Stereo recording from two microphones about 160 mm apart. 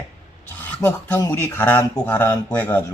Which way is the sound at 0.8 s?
15° left (ahead or behind).